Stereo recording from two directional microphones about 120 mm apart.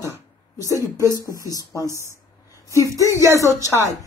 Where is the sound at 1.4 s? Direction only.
30° left (ahead or behind).